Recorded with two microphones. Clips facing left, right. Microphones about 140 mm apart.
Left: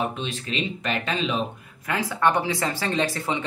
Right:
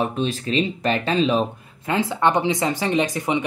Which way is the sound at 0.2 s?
35° right (ahead or behind).